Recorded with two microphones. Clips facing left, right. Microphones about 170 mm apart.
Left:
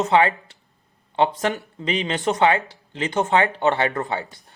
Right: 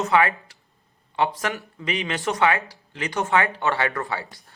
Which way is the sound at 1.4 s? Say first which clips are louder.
Left 4 dB; 25° left (ahead or behind).